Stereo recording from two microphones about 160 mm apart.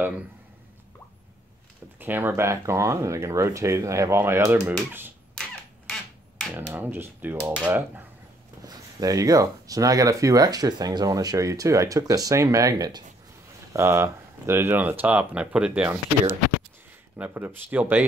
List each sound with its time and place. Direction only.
2.0 s speech: 10° right (ahead or behind)
5.3 s a sound: 5° left (ahead or behind)
6.5 s speech: 15° right (ahead or behind)
8.6 s speech: 20° right (ahead or behind)
17.2 s speech: 10° right (ahead or behind)